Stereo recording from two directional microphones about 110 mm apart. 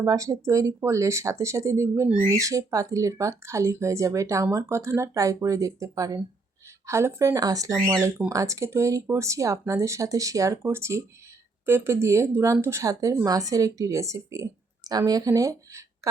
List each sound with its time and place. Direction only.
0.0 s a woman's voice: 30° right (ahead or behind)